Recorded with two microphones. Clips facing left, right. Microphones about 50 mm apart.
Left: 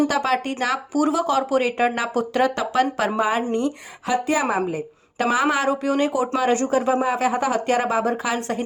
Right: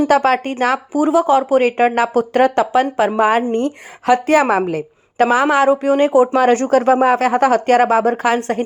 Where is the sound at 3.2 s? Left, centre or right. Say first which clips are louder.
Right 7 dB; right.